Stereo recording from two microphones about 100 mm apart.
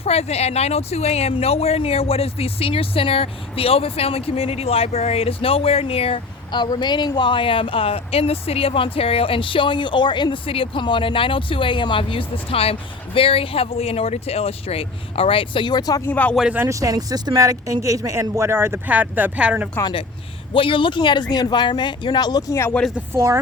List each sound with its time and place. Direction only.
0.0 s speech: 90° left
6.5 s speech: 50° left (ahead or behind)
16.0 s speech: 15° left (ahead or behind)
16.6 s speech: 35° right (ahead or behind); by 19.6 s 15° right (ahead or behind)
20.5 s speech: 60° left (ahead or behind); by 22.5 s 40° left (ahead or behind)
23.1 s a woman's voice: 30° right (ahead or behind)